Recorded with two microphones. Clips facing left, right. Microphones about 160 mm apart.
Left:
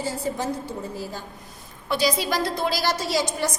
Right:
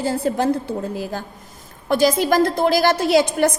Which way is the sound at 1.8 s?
45° right (ahead or behind).